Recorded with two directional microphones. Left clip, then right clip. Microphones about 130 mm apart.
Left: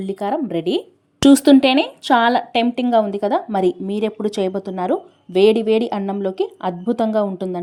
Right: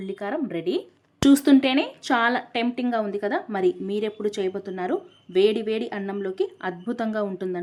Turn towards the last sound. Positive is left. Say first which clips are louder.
# left 7 dB
turn(degrees=35)  # may be behind; listen again after turning